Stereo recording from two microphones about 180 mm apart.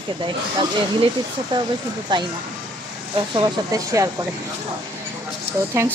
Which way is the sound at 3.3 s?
20° right (ahead or behind).